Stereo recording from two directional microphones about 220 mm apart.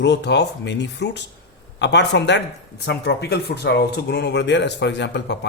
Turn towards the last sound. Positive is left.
turn(degrees=50)  # may be behind; listen again after turning